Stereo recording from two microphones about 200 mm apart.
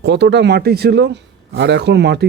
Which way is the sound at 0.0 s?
60° right (ahead or behind).